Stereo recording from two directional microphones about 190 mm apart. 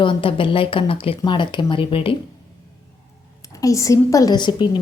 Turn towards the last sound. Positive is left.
turn(degrees=25)  # may be behind; listen again after turning